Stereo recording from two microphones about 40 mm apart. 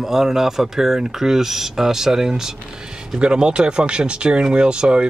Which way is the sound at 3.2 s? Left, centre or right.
Right.